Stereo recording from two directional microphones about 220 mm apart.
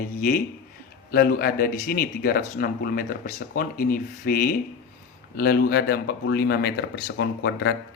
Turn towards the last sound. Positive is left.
turn(degrees=50)  # may be behind; listen again after turning